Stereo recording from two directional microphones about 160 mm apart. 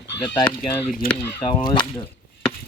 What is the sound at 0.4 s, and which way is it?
Speech, 15° left (ahead or behind).